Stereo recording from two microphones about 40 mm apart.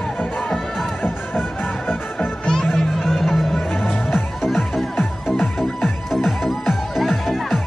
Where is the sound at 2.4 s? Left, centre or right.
Centre.